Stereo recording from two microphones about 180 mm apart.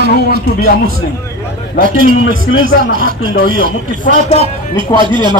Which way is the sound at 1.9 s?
50° right (ahead or behind).